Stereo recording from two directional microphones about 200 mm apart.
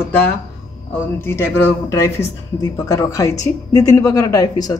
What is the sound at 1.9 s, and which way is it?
Speech, 15° left (ahead or behind).